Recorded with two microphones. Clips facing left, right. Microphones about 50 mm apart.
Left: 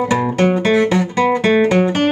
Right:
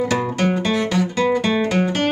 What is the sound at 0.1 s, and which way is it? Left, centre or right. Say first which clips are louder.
Music: left 5 dB; centre.